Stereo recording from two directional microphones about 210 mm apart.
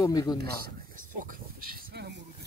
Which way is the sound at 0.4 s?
45° right (ahead or behind).